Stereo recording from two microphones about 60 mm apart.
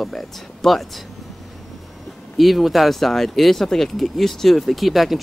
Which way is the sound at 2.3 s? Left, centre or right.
Centre.